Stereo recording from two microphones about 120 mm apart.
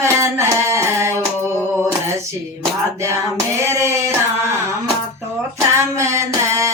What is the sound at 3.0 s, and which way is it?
Music, 25° right (ahead or behind).